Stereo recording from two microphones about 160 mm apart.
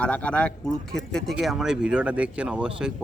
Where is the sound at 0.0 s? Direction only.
10° left (ahead or behind).